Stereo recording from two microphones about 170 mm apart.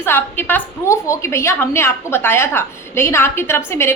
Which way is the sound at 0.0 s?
15° left (ahead or behind).